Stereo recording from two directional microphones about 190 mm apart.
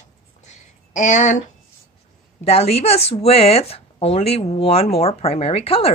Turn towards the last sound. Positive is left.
turn(degrees=30)  # may be behind; listen again after turning